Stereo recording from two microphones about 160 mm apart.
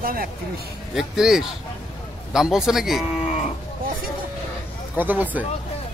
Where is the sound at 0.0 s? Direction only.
65° right (ahead or behind).